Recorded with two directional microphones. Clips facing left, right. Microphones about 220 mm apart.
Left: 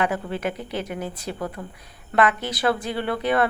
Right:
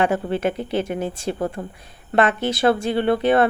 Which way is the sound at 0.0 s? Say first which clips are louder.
Right 5 dB; 25° right (ahead or behind).